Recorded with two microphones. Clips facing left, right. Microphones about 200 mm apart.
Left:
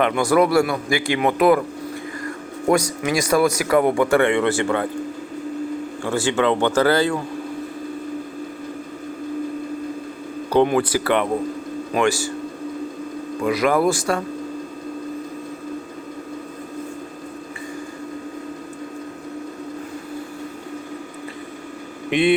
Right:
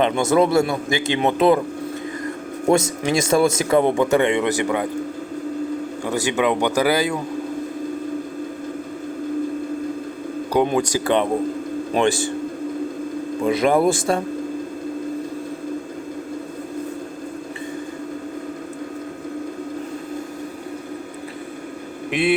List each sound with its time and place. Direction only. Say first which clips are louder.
0.0 s a man's voice: even; 25° right (ahead or behind)
2.6 s a man's voice: right 1 dB; 25° right (ahead or behind)
6.1 s speech: left 1 dB; 15° right (ahead or behind)
10.5 s speech: left 2 dB; 10° right (ahead or behind)
13.4 s a man's voice: right 1 dB; 25° right (ahead or behind)
22.1 s a man's voice: left 2 dB; centre (ahead or behind)